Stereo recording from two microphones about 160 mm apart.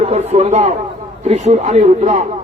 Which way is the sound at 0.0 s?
40° right (ahead or behind).